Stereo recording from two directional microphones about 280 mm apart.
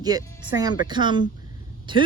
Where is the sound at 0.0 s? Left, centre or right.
Centre.